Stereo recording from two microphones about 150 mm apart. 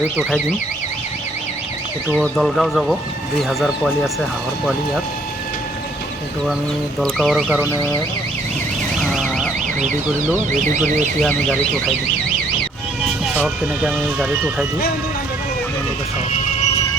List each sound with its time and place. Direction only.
2.1 s speech: 5° left (ahead or behind)
7.0 s speech: centre (ahead or behind)
9.0 s car alarm: 5° left (ahead or behind)
10.5 s speech: 55° right (ahead or behind)
13.3 s speech: 10° right (ahead or behind)
16.3 s music: 45° left (ahead or behind)